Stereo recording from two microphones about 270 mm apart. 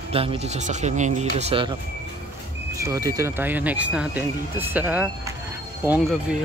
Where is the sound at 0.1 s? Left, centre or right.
Right.